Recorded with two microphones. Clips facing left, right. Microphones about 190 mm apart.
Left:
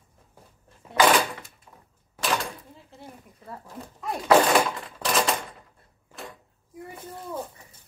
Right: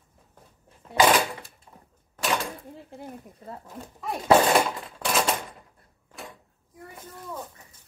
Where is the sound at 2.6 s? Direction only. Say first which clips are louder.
Right 6 dB; 55° right (ahead or behind).